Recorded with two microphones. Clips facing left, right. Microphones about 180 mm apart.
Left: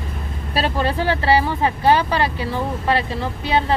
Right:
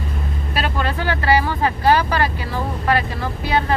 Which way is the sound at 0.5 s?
30° left (ahead or behind).